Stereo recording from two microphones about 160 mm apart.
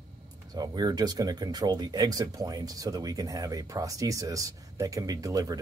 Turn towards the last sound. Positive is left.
turn(degrees=-20)  # may be behind; listen again after turning